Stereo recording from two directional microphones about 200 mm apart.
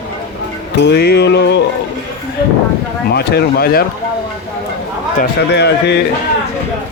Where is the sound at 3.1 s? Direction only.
55° left (ahead or behind).